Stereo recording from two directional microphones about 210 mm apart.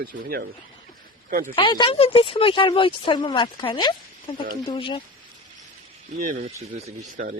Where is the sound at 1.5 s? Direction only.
20° left (ahead or behind).